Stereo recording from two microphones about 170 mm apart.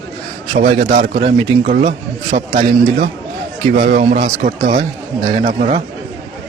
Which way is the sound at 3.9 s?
50° right (ahead or behind).